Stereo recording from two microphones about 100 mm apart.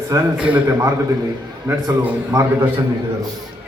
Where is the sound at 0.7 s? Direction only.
30° right (ahead or behind).